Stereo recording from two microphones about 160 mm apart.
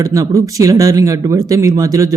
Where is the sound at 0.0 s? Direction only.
20° right (ahead or behind).